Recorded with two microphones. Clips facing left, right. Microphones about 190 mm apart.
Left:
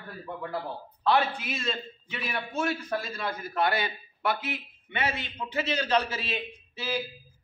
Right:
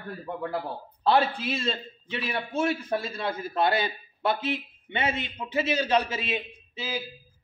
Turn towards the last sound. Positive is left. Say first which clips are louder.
# right 2 dB
turn(degrees=-20)  # may be behind; listen again after turning